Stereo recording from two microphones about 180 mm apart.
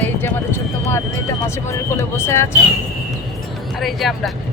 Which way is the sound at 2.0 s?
15° left (ahead or behind).